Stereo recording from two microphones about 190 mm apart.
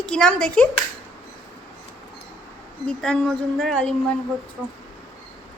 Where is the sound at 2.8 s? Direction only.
5° left (ahead or behind).